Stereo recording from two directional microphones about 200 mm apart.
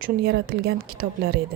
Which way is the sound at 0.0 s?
50° right (ahead or behind).